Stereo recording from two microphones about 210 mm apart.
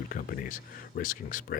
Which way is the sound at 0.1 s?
45° left (ahead or behind).